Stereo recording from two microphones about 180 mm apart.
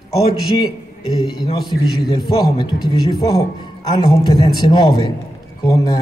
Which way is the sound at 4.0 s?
30° left (ahead or behind).